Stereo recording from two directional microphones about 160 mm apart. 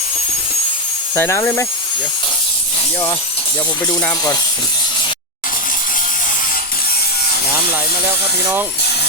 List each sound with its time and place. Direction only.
1.1 s speech: 15° left (ahead or behind)
4.1 s speech: 25° left (ahead or behind)